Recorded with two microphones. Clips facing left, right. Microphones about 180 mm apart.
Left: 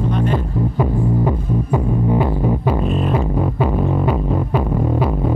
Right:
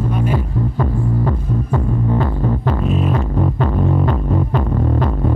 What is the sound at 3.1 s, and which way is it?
Music, 10° left (ahead or behind).